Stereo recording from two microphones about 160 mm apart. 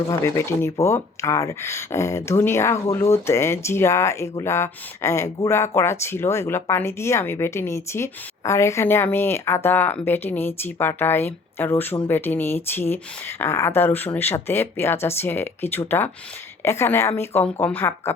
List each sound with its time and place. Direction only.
0.1 s speech: 20° left (ahead or behind)